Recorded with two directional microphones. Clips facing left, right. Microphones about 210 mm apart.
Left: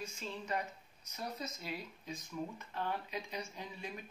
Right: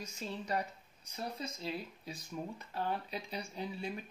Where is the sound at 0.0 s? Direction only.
40° right (ahead or behind).